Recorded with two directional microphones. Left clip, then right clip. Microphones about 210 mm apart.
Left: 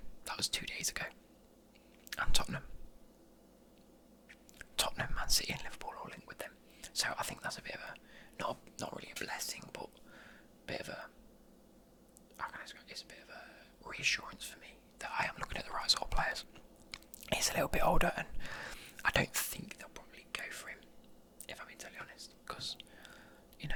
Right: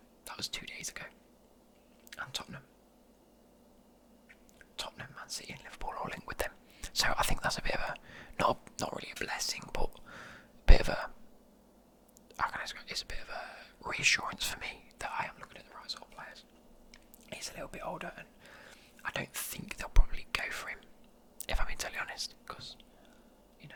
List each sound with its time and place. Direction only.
0.3 s speech: 5° left (ahead or behind)
4.3 s whispering: 10° left (ahead or behind)
5.9 s speech: 15° right (ahead or behind)
12.4 s speech: 15° right (ahead or behind)
14.9 s speech: 10° right (ahead or behind)
15.4 s speech: 20° left (ahead or behind)
19.5 s speech: 5° right (ahead or behind)
19.8 s whispering: 15° right (ahead or behind)
22.4 s whispering: 5° left (ahead or behind)